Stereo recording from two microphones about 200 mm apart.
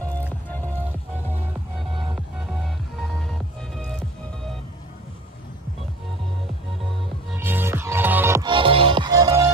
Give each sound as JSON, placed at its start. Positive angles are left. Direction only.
{"t": 1.8, "sound": "music", "side_deg": 0}
{"t": 7.3, "sound": "music", "side_deg": -10}
{"t": 8.5, "sound": "music", "side_deg": -25}